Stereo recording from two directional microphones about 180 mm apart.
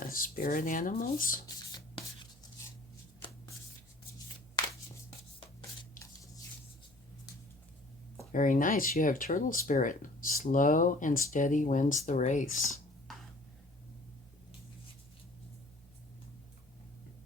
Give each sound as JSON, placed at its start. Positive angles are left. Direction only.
{"t": 0.0, "sound": "speech", "side_deg": 50}
{"t": 8.3, "sound": "speech", "side_deg": 45}